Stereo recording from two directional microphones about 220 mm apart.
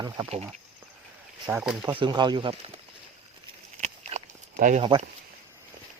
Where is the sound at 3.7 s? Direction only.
30° right (ahead or behind).